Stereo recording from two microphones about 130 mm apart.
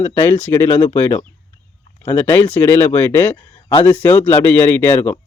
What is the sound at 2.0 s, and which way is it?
Speech, 20° left (ahead or behind).